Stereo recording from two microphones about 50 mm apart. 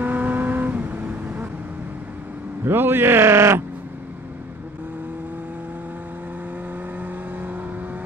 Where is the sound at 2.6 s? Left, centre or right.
Right.